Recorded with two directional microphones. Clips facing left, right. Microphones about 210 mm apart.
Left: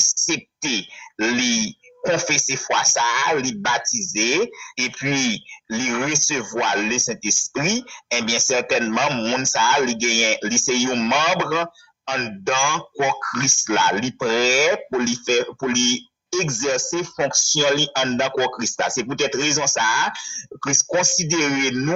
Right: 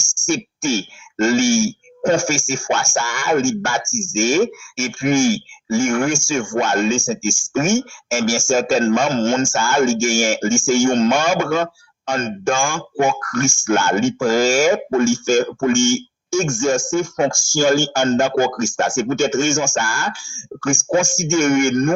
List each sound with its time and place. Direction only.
0.3 s speech: 50° right (ahead or behind)